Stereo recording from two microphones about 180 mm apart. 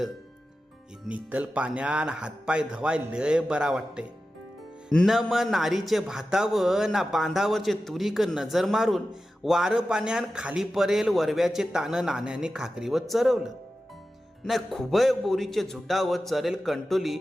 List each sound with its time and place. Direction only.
1.0 s a man's voice: 5° right (ahead or behind)